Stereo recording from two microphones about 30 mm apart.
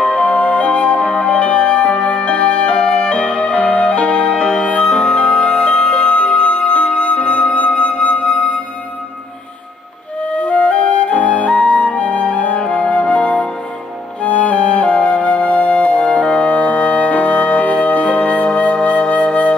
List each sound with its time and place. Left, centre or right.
0.0 s flute: left
0.4 s music: left
2.8 s music: left
4.6 s music: left
4.9 s music: left
10.3 s flute: left
14.2 s music: left
15.0 s flute: left
16.3 s music: left
18.9 s flute: left